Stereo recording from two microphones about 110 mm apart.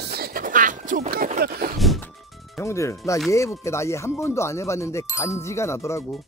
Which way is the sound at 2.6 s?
25° left (ahead or behind).